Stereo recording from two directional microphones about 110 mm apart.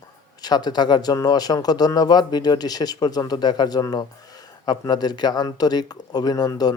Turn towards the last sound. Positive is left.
turn(degrees=35)  # may be behind; listen again after turning